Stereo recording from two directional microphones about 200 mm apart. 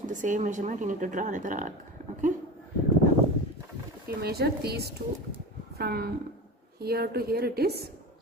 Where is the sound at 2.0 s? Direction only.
40° right (ahead or behind).